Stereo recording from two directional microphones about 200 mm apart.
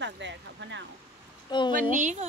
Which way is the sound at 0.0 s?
60° right (ahead or behind).